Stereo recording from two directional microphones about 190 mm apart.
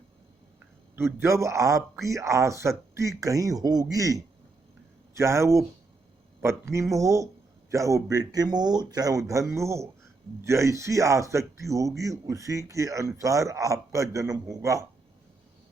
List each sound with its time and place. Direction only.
0.9 s a man's voice: 15° right (ahead or behind)